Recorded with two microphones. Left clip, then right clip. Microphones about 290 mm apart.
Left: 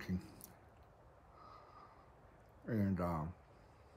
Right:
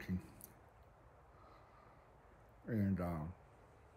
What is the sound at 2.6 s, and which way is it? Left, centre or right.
Speech, centre.